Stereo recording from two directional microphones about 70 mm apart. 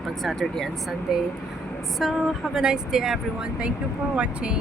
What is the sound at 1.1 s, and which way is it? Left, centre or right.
Speech, centre.